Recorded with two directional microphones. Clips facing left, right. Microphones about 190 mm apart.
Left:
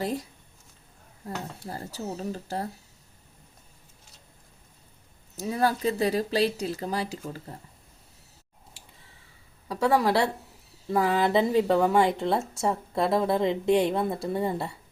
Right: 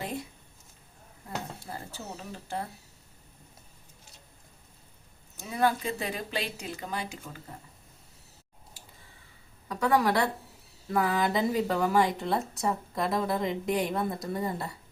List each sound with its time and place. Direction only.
0.0 s a sound: 35° left (ahead or behind)
1.7 s speech: 40° left (ahead or behind)
5.4 s speech: 35° left (ahead or behind)
9.6 s a woman's voice: 30° left (ahead or behind)